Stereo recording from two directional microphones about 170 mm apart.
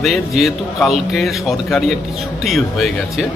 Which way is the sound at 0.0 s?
Centre (ahead or behind).